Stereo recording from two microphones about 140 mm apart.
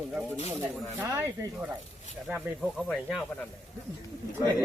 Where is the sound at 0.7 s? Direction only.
20° right (ahead or behind).